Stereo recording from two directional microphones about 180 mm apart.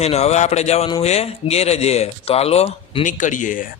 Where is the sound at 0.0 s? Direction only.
35° left (ahead or behind).